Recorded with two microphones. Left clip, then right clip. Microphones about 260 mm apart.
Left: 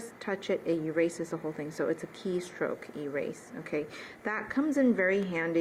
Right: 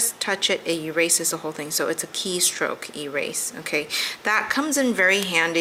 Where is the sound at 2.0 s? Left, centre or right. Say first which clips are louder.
Right 9 dB; centre.